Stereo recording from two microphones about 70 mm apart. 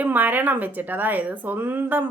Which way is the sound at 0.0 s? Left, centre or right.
Right.